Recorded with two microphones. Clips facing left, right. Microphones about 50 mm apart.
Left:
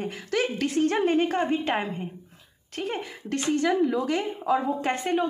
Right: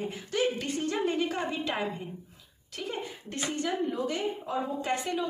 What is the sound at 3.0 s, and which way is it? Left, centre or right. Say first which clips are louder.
A woman's voice: left 6 dB; left.